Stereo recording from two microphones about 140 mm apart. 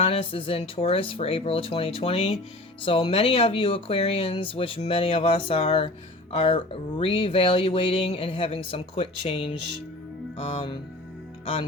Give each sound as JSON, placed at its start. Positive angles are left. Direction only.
{"t": 0.0, "sound": "speech", "side_deg": 40}